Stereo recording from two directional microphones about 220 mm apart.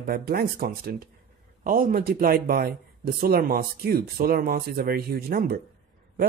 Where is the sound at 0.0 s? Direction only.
45° right (ahead or behind).